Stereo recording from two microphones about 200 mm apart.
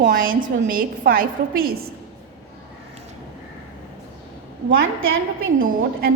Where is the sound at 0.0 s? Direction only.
45° right (ahead or behind).